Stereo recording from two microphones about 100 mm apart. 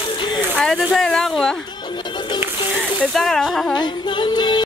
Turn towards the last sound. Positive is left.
turn(degrees=45)  # may be behind; listen again after turning